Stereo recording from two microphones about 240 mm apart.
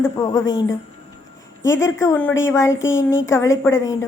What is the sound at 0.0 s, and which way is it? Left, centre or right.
Speech, centre.